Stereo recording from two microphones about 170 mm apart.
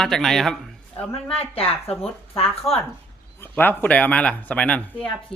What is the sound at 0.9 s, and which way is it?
Speech, 35° left (ahead or behind).